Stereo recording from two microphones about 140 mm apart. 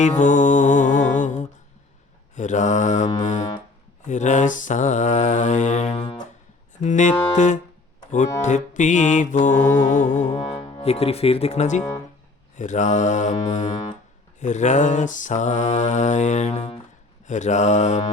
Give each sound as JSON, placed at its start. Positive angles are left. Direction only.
{"t": 0.2, "sound": "music", "side_deg": 60}
{"t": 2.3, "sound": "mantra", "side_deg": 60}
{"t": 5.9, "sound": "music", "side_deg": 35}
{"t": 6.8, "sound": "mantra", "side_deg": 60}
{"t": 10.3, "sound": "speech", "side_deg": 45}
{"t": 12.5, "sound": "mantra", "side_deg": 60}